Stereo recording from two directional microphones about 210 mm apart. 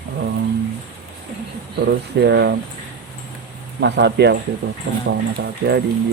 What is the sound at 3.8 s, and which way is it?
Speech, 55° right (ahead or behind).